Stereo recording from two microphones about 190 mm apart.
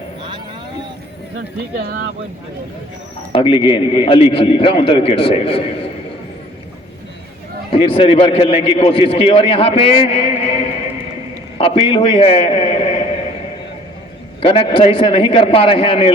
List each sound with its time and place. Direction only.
3.3 s a man's voice: 30° left (ahead or behind)
7.7 s a man's voice: 30° left (ahead or behind)
14.4 s a man's voice: 25° left (ahead or behind)